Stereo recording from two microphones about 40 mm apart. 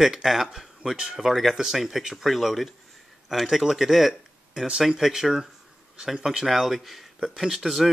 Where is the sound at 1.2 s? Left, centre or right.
Centre.